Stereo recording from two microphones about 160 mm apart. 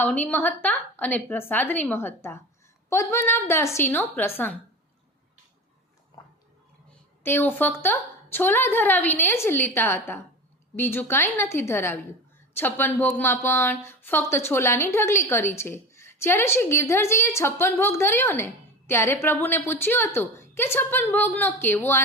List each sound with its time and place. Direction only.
0.0 s a woman's voice: 10° left (ahead or behind)
6.1 s a sound: 25° left (ahead or behind)
7.3 s a woman's voice: 10° left (ahead or behind)